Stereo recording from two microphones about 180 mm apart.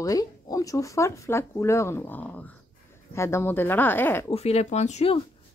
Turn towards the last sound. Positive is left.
turn(degrees=35)  # may be behind; listen again after turning